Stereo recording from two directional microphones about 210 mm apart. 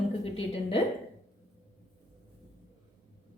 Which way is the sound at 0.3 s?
25° left (ahead or behind).